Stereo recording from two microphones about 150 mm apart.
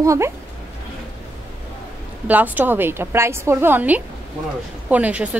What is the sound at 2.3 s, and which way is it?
A woman's voice, 10° right (ahead or behind).